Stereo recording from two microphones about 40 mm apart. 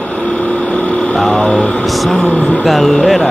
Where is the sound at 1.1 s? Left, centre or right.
Centre.